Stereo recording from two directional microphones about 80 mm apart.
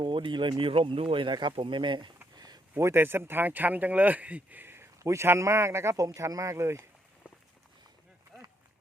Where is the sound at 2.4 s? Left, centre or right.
Right.